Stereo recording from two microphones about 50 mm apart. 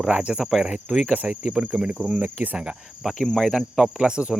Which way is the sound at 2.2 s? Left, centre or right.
Right.